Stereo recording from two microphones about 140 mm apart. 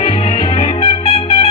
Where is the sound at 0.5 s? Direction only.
55° left (ahead or behind).